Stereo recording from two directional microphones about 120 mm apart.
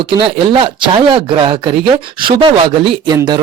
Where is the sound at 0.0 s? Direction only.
45° right (ahead or behind).